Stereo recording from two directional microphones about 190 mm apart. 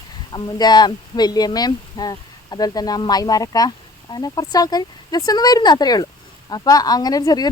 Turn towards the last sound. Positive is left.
turn(degrees=20)  # may be behind; listen again after turning